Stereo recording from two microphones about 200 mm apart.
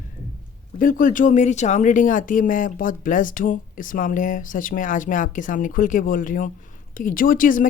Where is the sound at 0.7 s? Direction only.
45° left (ahead or behind).